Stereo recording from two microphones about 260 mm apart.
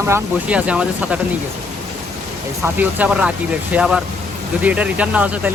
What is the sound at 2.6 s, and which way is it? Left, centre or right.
Speech, centre.